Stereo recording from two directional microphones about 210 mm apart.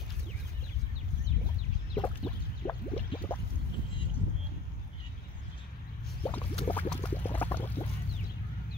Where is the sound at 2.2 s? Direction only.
20° left (ahead or behind).